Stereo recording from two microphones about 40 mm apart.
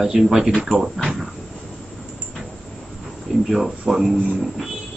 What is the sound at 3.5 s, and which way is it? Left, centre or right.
Speech, centre.